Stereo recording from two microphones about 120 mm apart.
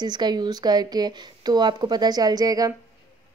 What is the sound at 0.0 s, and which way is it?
A woman's voice, 35° right (ahead or behind).